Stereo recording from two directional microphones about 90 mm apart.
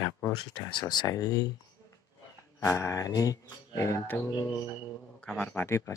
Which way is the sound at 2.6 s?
35° left (ahead or behind).